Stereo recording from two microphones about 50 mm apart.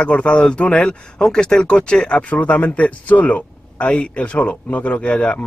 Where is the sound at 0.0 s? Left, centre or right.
Left.